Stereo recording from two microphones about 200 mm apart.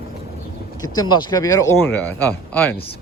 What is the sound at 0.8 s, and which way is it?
A man's voice, 20° left (ahead or behind).